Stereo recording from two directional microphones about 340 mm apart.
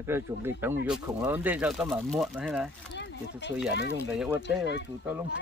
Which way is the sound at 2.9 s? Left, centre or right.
Left.